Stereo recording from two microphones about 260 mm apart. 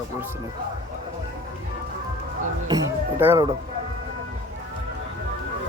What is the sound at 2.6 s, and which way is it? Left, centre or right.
Speech, centre.